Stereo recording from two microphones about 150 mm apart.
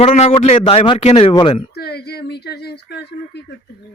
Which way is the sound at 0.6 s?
35° left (ahead or behind).